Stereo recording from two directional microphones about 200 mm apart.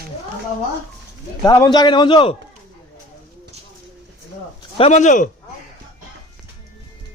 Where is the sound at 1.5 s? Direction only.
20° left (ahead or behind).